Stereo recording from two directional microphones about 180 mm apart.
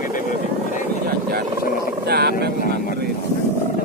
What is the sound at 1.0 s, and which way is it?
Vehicle, 60° right (ahead or behind).